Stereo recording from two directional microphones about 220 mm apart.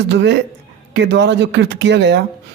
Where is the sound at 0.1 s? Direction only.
55° right (ahead or behind).